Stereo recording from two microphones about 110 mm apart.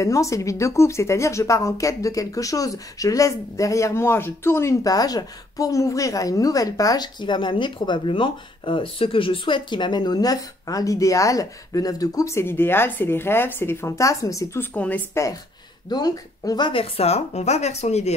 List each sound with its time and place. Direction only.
0.0 s speech: 30° left (ahead or behind)
15.9 s speech: 35° left (ahead or behind); by 18.1 s 80° left